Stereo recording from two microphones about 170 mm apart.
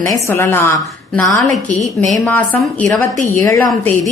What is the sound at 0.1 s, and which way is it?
Speech, 15° left (ahead or behind).